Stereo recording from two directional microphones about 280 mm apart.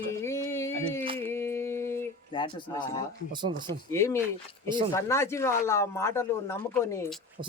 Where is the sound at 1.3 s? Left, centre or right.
Centre.